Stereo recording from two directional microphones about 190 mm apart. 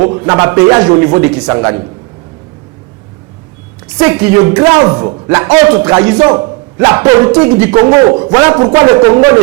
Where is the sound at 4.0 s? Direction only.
10° right (ahead or behind).